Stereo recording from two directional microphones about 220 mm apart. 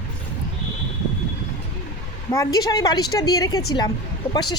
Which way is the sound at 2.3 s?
15° left (ahead or behind).